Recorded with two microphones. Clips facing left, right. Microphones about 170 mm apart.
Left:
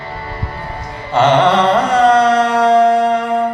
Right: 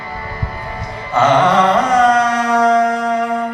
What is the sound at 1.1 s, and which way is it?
Carnatic music, 30° left (ahead or behind).